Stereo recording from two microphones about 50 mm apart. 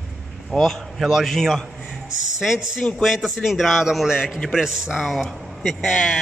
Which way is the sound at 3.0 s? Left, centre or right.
Centre.